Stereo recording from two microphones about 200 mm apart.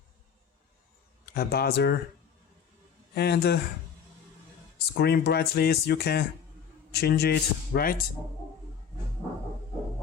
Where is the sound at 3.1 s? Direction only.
55° left (ahead or behind).